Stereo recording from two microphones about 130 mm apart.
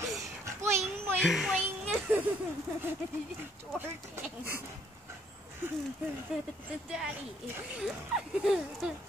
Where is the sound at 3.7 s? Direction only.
15° right (ahead or behind).